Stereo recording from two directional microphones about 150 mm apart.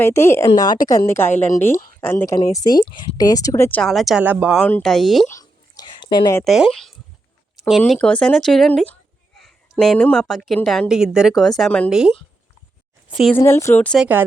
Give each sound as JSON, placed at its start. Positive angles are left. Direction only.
{"t": 0.0, "sound": "a woman's voice", "side_deg": 15}
{"t": 3.8, "sound": "speech", "side_deg": 0}
{"t": 4.2, "sound": "speech", "side_deg": -10}
{"t": 4.5, "sound": "speech", "side_deg": 5}
{"t": 5.3, "sound": "whispering", "side_deg": 25}
{"t": 6.4, "sound": "speech", "side_deg": 0}
{"t": 7.6, "sound": "a sound", "side_deg": -5}
{"t": 7.9, "sound": "speech", "side_deg": 5}
{"t": 13.3, "sound": "a woman's voice", "side_deg": 15}
{"t": 14.0, "sound": "speech", "side_deg": -10}